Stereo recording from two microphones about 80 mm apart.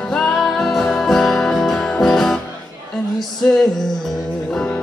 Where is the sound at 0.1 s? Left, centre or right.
Centre.